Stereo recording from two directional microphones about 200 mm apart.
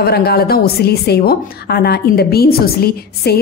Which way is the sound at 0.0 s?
50° left (ahead or behind).